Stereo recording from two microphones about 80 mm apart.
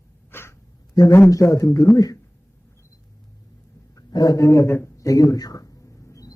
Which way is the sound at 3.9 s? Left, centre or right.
Left.